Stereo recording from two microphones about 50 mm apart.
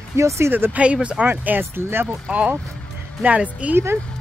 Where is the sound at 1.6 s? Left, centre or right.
Right.